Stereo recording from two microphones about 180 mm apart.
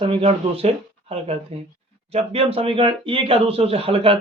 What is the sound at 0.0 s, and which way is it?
Speech, 30° right (ahead or behind).